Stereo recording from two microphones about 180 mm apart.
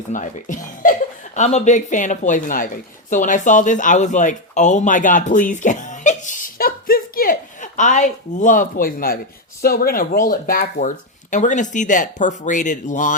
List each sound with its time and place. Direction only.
0.1 s speech: 45° left (ahead or behind)